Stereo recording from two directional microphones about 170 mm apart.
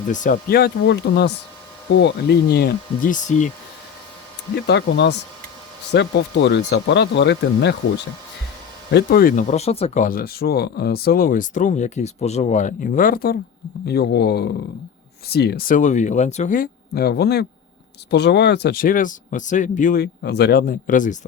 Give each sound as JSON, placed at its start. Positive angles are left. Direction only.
{"t": 0.1, "sound": "speech", "side_deg": 50}
{"t": 0.5, "sound": "speech", "side_deg": 70}
{"t": 3.1, "sound": "speech", "side_deg": 45}
{"t": 4.6, "sound": "speech", "side_deg": 90}
{"t": 8.9, "sound": "speech", "side_deg": 75}
{"t": 9.5, "sound": "speech", "side_deg": 40}
{"t": 13.8, "sound": "speech", "side_deg": 70}
{"t": 16.9, "sound": "speech", "side_deg": 70}
{"t": 18.1, "sound": "speech", "side_deg": 80}